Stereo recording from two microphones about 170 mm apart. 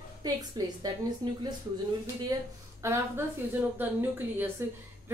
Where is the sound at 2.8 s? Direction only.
15° right (ahead or behind).